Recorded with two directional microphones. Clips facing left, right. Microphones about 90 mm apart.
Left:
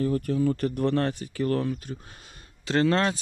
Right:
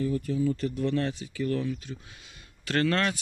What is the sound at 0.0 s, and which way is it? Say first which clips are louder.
Speech: left 3 dB; 55° left (ahead or behind).